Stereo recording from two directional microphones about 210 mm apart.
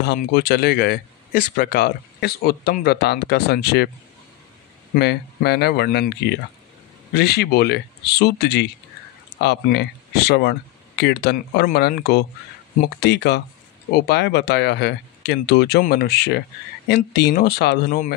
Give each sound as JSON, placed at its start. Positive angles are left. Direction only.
{"t": 0.0, "sound": "speech", "side_deg": 50}
{"t": 4.9, "sound": "speech", "side_deg": 50}